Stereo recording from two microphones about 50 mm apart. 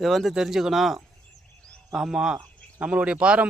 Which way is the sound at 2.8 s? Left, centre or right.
Right.